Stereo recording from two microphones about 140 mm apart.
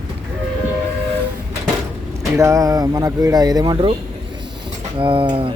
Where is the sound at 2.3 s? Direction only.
20° right (ahead or behind).